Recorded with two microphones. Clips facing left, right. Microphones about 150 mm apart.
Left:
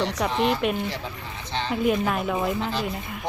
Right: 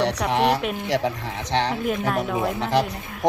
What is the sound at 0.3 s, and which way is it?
Speech, 70° right (ahead or behind).